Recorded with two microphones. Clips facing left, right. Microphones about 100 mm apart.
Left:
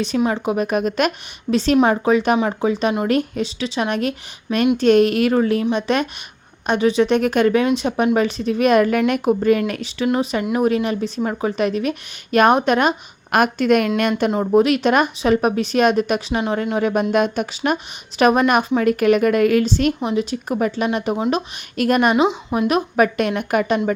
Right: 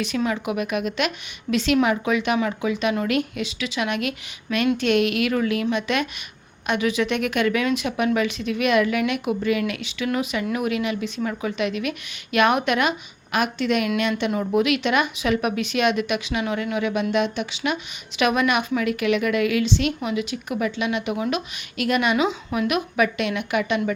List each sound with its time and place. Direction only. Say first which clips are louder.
0.3 s speech: left 5 dB; 30° left (ahead or behind)
13.3 s a woman's voice: left 6 dB; 50° left (ahead or behind)
14.3 s a woman's voice: left 6 dB; 35° left (ahead or behind)
22.1 s speech: left 5 dB; 25° left (ahead or behind); by 23.9 s 40° left (ahead or behind)